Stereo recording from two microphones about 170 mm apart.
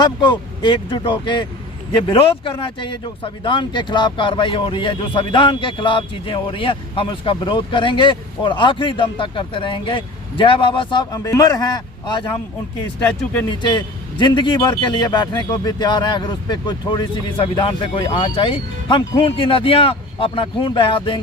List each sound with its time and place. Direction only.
0.0 s speech: 25° left (ahead or behind)
13.5 s speech: 25° left (ahead or behind)